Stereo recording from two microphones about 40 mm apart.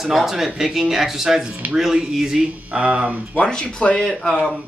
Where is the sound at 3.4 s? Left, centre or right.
Left.